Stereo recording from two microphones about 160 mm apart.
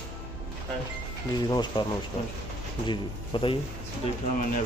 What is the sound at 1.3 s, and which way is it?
Speech, 25° left (ahead or behind).